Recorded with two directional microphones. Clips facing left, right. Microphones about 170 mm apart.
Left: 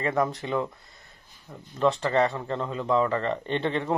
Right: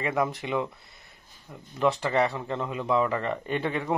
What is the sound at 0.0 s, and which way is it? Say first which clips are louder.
Speech: left 1 dB; 10° right (ahead or behind).